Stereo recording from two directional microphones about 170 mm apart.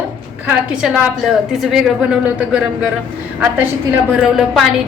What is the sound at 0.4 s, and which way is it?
A woman's voice, 5° right (ahead or behind).